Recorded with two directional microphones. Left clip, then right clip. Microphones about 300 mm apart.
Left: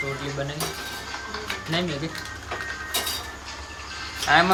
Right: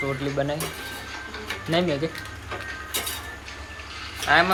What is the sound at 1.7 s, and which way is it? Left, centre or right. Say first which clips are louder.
Speech: right 5 dB; centre.